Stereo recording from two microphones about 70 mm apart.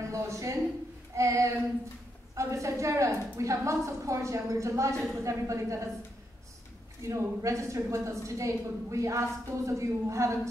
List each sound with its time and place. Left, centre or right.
0.1 s a sound: right
2.3 s a woman's voice: right
7.0 s a woman's voice: right